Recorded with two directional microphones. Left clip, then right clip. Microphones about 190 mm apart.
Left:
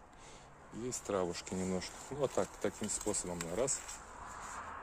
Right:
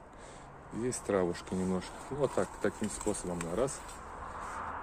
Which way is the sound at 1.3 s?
20° left (ahead or behind).